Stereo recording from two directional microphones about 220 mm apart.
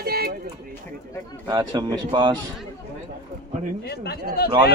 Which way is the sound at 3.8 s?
45° left (ahead or behind).